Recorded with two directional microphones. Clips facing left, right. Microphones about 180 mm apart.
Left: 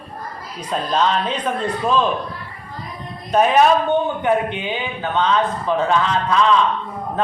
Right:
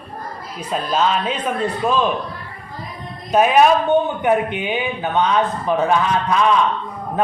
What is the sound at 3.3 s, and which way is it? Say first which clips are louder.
Speech: right 1 dB; 10° right (ahead or behind).